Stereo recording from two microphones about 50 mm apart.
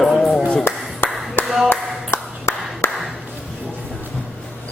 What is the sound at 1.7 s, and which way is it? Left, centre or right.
Clapping, left.